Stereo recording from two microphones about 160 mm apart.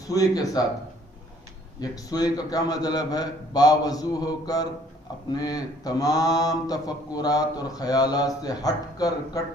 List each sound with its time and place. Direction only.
0.1 s speech: 20° left (ahead or behind)
1.8 s speech: 25° left (ahead or behind)